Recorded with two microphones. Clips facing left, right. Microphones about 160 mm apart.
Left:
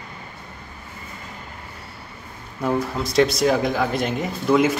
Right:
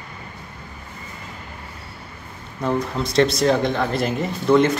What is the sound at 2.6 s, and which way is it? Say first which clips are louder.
Speech: even; 5° left (ahead or behind).